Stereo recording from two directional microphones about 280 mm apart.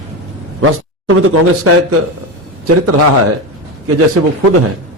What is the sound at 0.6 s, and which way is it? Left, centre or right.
A man's voice, right.